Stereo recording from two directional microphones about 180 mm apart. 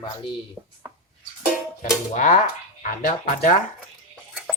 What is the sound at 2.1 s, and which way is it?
Speech, 45° left (ahead or behind).